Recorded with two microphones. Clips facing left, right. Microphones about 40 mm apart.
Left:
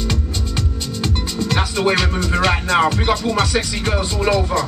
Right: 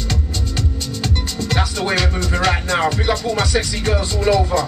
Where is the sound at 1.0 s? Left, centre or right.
Centre.